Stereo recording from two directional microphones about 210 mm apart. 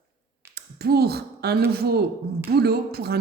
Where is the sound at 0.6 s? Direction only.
50° right (ahead or behind).